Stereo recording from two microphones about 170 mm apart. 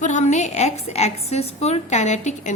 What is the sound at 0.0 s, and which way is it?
A woman's voice, 45° left (ahead or behind).